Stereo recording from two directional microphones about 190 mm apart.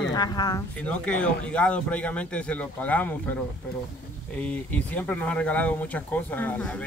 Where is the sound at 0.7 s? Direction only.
5° left (ahead or behind).